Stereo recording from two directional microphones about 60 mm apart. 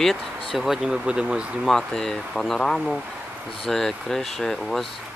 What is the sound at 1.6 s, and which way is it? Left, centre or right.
Speech, centre.